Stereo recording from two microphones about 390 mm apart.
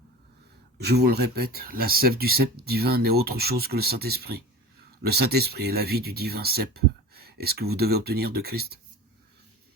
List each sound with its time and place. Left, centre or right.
0.8 s speech: right